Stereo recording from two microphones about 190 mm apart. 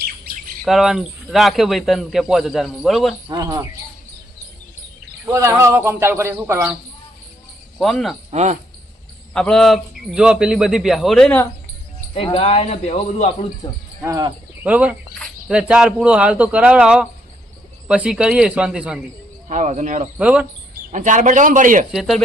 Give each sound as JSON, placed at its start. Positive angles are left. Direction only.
{"t": 0.6, "sound": "a man's voice", "side_deg": 0}
{"t": 3.2, "sound": "cricket", "side_deg": -20}
{"t": 5.2, "sound": "speech", "side_deg": -15}
{"t": 7.8, "sound": "a man's voice", "side_deg": 0}
{"t": 8.3, "sound": "speech", "side_deg": -35}
{"t": 9.3, "sound": "a man's voice", "side_deg": 5}
{"t": 12.1, "sound": "speech", "side_deg": 30}
{"t": 14.0, "sound": "cricket", "side_deg": -20}
{"t": 14.6, "sound": "a man's voice", "side_deg": -5}
{"t": 19.5, "sound": "speech", "side_deg": -40}
{"t": 20.1, "sound": "speech", "side_deg": -5}
{"t": 20.9, "sound": "speech", "side_deg": -40}
{"t": 21.9, "sound": "a man's voice", "side_deg": 0}